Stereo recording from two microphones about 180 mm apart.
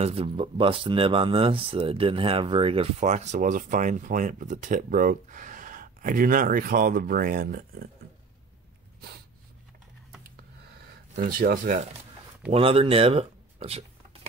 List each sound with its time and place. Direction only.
0.0 s speech: 30° right (ahead or behind); by 7.9 s 55° right (ahead or behind)
11.1 s speech: 55° right (ahead or behind)
12.5 s speech: 30° right (ahead or behind)